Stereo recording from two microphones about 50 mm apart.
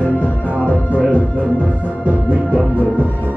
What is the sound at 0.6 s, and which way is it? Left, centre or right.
Music, right.